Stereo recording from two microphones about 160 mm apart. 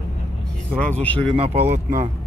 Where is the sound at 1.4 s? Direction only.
40° right (ahead or behind).